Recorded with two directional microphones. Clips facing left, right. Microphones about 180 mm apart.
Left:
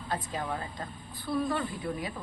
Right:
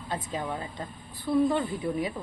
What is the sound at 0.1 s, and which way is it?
A woman's voice, 20° right (ahead or behind).